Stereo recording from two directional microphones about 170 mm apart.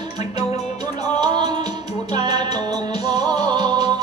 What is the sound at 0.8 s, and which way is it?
Music, 25° right (ahead or behind).